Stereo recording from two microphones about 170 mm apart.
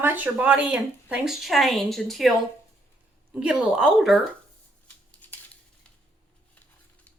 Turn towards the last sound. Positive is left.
turn(degrees=10)  # may be behind; listen again after turning